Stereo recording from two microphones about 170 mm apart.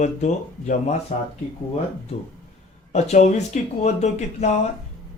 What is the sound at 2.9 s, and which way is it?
Speech, 40° left (ahead or behind).